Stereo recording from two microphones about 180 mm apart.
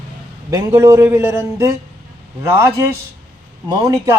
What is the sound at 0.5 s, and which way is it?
A man's voice, 15° right (ahead or behind).